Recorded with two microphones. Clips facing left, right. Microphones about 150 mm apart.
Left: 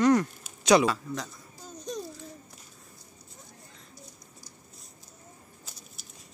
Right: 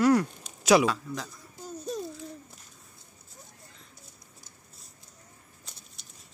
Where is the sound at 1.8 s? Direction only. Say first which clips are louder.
Right 2 dB; 5° right (ahead or behind).